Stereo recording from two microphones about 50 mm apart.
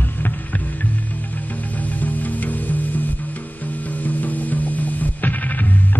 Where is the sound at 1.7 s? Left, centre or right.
Left.